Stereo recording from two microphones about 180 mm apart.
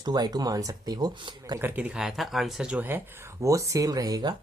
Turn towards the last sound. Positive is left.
turn(degrees=-20)  # may be behind; listen again after turning